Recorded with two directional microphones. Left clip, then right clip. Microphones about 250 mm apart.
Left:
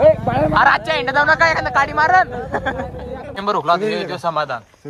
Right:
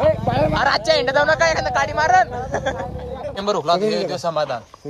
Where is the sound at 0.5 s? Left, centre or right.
Centre.